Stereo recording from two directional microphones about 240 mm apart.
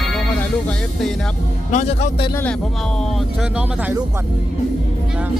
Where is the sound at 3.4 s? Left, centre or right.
Centre.